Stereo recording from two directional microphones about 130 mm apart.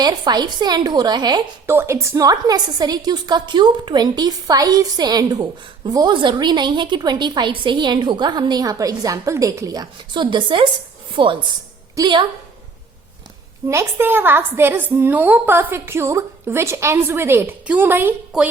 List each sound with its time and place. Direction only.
0.0 s a woman's voice: 30° right (ahead or behind)
1.6 s a woman's voice: 15° right (ahead or behind); by 12.2 s 35° right (ahead or behind)
13.7 s a woman's voice: 20° right (ahead or behind)